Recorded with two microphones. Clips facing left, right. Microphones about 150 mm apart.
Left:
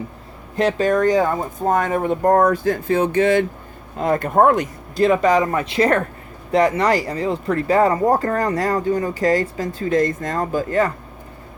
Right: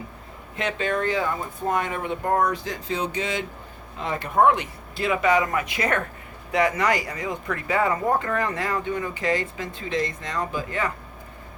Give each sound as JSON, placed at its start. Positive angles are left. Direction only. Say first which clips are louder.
{"t": 0.5, "sound": "speech", "louder": "left 8 dB", "side_deg": 40}